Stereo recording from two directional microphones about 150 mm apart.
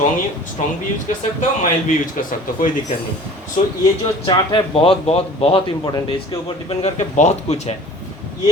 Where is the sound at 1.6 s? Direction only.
60° left (ahead or behind).